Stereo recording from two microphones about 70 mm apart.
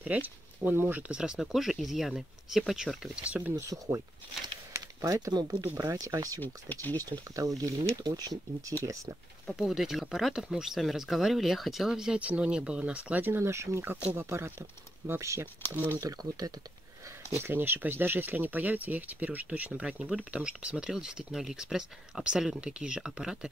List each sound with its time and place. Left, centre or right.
0.0 s speech: right
1.1 s speech: centre
3.5 s speech: right
5.0 s speech: right
5.3 s speech: right
6.4 s speech: left
7.0 s speech: right
8.7 s speech: right
9.5 s speech: centre
13.2 s speech: right
15.7 s speech: right
16.0 s speech: right
17.4 s speech: right; by 23.5 s centre